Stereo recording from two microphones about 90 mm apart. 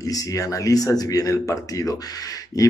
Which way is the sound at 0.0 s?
40° left (ahead or behind).